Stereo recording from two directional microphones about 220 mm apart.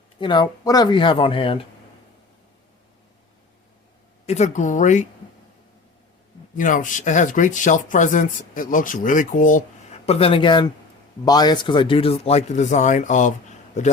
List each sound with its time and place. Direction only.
0.2 s speech: 20° left (ahead or behind)
4.3 s speech: 30° left (ahead or behind)
6.6 s speech: 35° left (ahead or behind)
10.1 s speech: 25° left (ahead or behind)